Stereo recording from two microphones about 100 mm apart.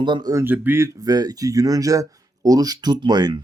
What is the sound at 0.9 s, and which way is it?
Speech, 40° right (ahead or behind).